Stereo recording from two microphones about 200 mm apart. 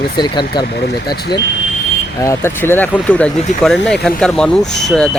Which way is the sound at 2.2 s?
10° left (ahead or behind).